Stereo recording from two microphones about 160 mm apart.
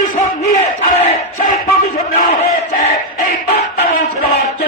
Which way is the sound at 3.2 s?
60° left (ahead or behind).